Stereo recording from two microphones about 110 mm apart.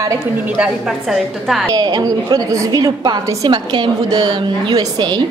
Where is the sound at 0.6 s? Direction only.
5° right (ahead or behind).